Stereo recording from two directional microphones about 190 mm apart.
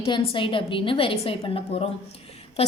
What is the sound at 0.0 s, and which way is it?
A woman's voice, 25° left (ahead or behind).